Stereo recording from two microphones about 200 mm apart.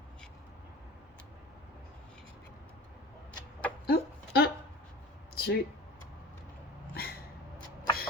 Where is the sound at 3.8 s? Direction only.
50° left (ahead or behind).